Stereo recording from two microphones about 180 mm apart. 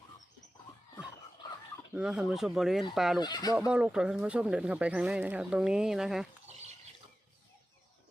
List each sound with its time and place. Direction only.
1.9 s speech: 5° right (ahead or behind)
3.2 s speech: 25° left (ahead or behind)
3.7 s speech: 5° right (ahead or behind)